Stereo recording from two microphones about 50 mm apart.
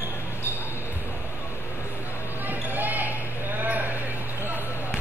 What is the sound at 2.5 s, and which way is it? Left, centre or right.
Basketball bounce, right.